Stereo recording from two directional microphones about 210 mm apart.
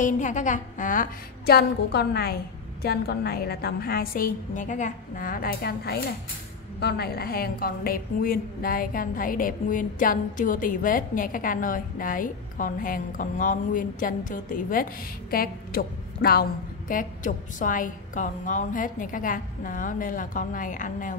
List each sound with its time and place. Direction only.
0.0 s a woman's voice: 35° left (ahead or behind)